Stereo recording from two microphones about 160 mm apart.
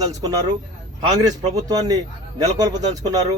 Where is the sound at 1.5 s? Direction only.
25° right (ahead or behind).